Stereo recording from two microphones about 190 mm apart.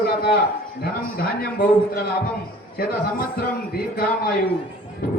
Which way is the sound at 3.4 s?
50° left (ahead or behind).